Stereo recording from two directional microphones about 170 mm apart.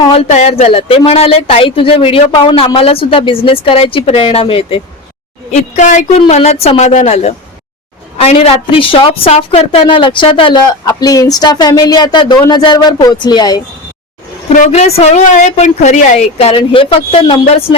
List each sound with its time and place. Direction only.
0.0 s a woman's voice: 35° left (ahead or behind)
14.6 s speech: 40° left (ahead or behind)